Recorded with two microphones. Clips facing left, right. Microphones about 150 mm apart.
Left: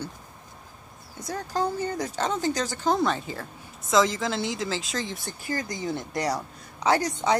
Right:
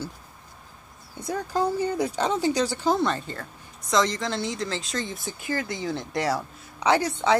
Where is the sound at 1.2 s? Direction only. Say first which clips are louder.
Right 2 dB; 10° right (ahead or behind).